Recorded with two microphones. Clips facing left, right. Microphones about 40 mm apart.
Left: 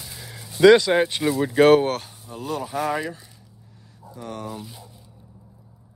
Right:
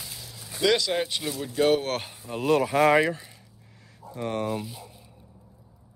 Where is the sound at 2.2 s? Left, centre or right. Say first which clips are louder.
Right 9 dB; right.